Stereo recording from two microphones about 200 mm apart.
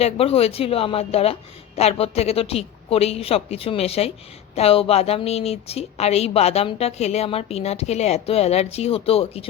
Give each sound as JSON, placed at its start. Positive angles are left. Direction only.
{"t": 0.0, "sound": "a woman's voice", "side_deg": 30}